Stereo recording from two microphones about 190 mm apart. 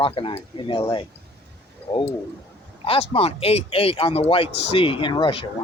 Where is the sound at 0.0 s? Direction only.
30° left (ahead or behind).